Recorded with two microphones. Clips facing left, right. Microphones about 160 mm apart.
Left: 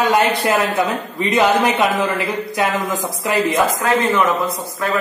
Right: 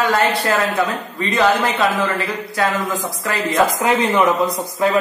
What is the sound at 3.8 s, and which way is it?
Speech, 15° right (ahead or behind).